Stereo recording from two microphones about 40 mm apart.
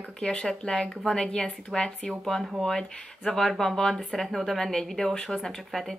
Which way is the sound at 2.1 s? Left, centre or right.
Centre.